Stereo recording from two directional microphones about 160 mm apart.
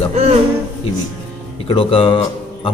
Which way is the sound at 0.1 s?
40° right (ahead or behind).